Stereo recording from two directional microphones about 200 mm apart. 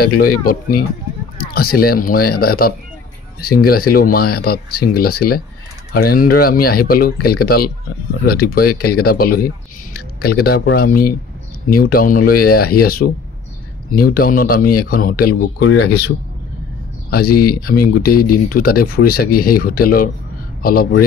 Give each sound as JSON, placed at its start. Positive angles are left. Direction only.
{"t": 0.0, "sound": "speech", "side_deg": 50}
{"t": 15.6, "sound": "speech", "side_deg": 90}
{"t": 17.1, "sound": "speech", "side_deg": 50}